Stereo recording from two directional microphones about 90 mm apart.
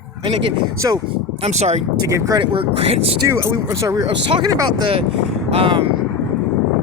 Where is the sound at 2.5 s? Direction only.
80° right.